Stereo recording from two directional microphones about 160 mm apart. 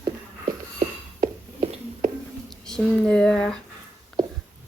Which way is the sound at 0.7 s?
40° right (ahead or behind).